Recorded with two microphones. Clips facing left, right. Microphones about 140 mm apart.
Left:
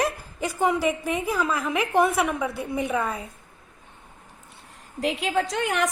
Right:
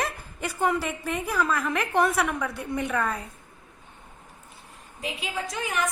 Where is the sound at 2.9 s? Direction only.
20° left (ahead or behind).